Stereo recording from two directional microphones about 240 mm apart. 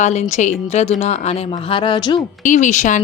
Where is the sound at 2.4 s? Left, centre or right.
Left.